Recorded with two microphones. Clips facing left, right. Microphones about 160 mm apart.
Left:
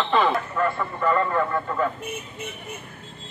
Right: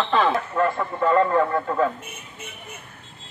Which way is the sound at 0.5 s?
45° right (ahead or behind).